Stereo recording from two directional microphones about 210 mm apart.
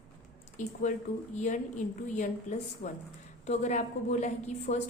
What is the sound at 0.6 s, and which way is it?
A woman's voice, 35° left (ahead or behind).